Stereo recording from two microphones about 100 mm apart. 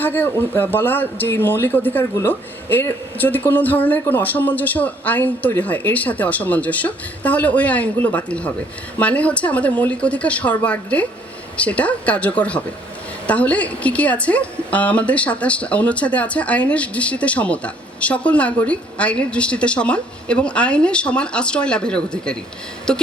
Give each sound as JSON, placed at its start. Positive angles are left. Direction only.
{"t": 0.0, "sound": "a woman's voice", "side_deg": 20}